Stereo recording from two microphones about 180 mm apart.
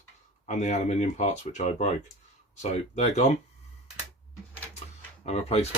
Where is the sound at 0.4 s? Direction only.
40° left (ahead or behind).